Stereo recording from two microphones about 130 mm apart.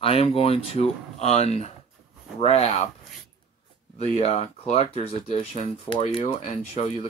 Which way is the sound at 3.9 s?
55° left (ahead or behind).